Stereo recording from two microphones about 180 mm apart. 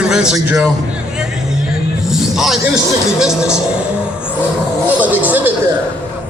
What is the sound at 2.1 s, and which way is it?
Music, centre (ahead or behind).